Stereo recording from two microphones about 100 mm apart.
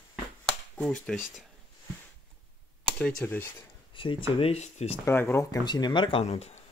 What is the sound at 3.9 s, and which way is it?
Speech, 55° left (ahead or behind).